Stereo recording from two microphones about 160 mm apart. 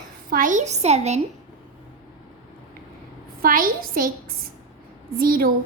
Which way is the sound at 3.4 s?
60° right (ahead or behind).